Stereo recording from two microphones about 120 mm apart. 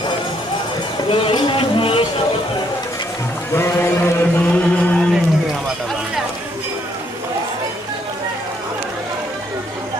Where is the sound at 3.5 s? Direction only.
20° left (ahead or behind).